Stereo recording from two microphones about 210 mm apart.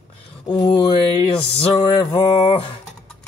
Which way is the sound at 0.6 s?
20° left (ahead or behind).